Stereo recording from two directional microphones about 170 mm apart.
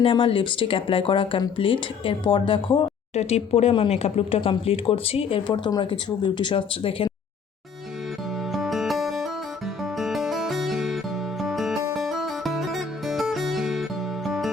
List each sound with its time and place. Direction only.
0.0 s speech: 30° left (ahead or behind)
8.5 s music: centre (ahead or behind)